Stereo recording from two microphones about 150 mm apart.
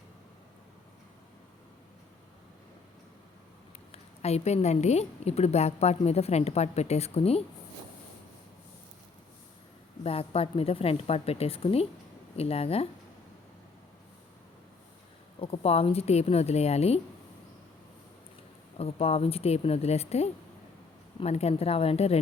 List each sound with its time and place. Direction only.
3.9 s a woman's voice: 45° left (ahead or behind)
10.0 s a woman's voice: 40° left (ahead or behind)
15.4 s a woman's voice: 40° left (ahead or behind)
18.8 s a woman's voice: 40° left (ahead or behind)